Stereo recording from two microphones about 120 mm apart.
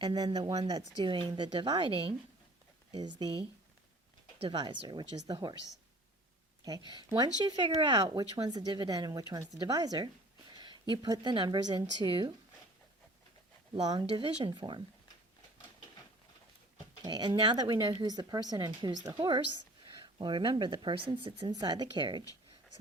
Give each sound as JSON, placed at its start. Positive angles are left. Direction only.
{"t": 0.0, "sound": "speech", "side_deg": -35}
{"t": 2.9, "sound": "speech", "side_deg": -35}
{"t": 6.7, "sound": "speech", "side_deg": -35}
{"t": 14.1, "sound": "speech", "side_deg": -45}
{"t": 17.0, "sound": "speech", "side_deg": -35}